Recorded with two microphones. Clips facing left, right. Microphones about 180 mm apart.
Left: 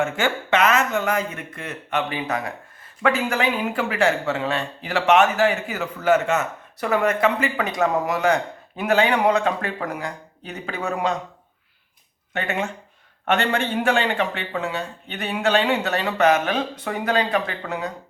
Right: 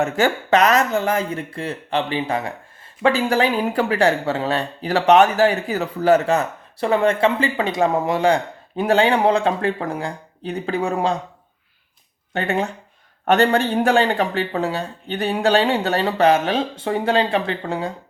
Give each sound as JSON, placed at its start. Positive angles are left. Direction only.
{"t": 0.0, "sound": "speech", "side_deg": -40}
{"t": 12.3, "sound": "speech", "side_deg": -35}